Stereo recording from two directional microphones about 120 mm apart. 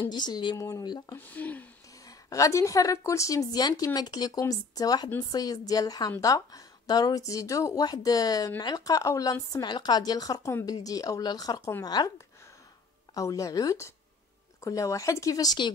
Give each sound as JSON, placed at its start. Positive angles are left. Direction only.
{"t": 0.1, "sound": "speech", "side_deg": 35}
{"t": 1.1, "sound": "speech", "side_deg": 15}
{"t": 2.0, "sound": "a woman's voice", "side_deg": 30}
{"t": 13.1, "sound": "a woman's voice", "side_deg": 25}